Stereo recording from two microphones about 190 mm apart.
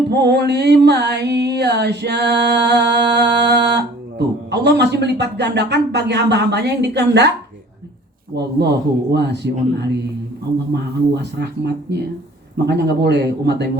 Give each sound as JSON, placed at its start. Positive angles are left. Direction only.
{"t": 0.1, "sound": "music", "side_deg": -60}
{"t": 8.4, "sound": "speech", "side_deg": -60}
{"t": 11.1, "sound": "speech", "side_deg": -60}